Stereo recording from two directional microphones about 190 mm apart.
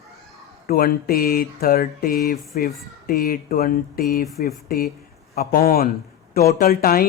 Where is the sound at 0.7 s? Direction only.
50° left (ahead or behind).